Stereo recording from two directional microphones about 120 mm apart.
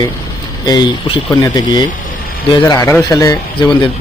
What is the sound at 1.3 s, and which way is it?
Speech, 30° left (ahead or behind).